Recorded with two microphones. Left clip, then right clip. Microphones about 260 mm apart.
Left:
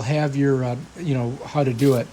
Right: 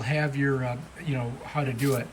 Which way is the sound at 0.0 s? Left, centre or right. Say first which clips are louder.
Left 5 dB; centre.